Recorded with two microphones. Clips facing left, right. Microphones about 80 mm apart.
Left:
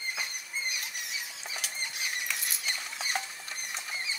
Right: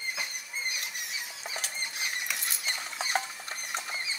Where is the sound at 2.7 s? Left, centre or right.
Right.